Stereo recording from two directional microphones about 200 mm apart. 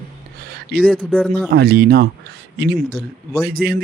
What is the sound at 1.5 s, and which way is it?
Speech, 55° right (ahead or behind).